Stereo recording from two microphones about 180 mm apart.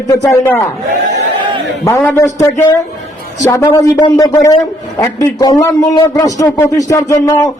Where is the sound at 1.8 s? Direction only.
15° left (ahead or behind).